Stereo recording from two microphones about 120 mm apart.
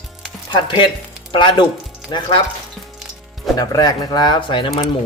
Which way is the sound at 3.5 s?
35° left (ahead or behind).